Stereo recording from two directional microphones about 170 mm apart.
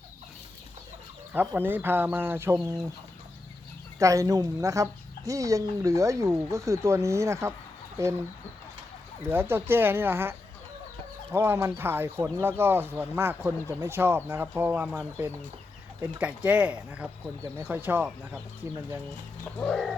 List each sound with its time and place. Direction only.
1.3 s speech: 10° right (ahead or behind)
3.9 s speech: 20° right (ahead or behind)
9.3 s speech: 15° right (ahead or behind)
19.5 s bird: 5° left (ahead or behind)